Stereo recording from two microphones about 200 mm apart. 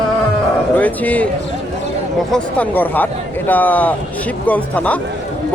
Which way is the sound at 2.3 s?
10° left (ahead or behind).